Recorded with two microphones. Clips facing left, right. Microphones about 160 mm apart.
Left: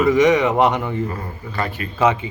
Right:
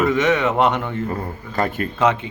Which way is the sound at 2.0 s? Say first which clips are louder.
Left 2 dB; 10° left (ahead or behind).